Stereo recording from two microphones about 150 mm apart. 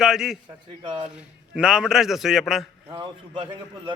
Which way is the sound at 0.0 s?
5° right (ahead or behind).